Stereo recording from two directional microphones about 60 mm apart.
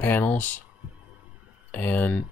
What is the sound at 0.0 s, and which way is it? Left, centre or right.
Speech, left.